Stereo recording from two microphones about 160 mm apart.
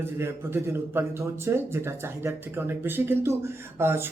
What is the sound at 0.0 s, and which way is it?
A man's voice, 15° right (ahead or behind).